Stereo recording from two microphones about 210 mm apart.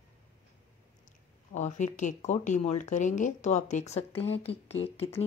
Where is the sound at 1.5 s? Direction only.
35° left (ahead or behind).